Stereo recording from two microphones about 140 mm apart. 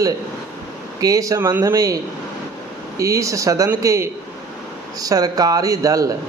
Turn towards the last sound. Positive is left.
turn(degrees=-25)  # may be behind; listen again after turning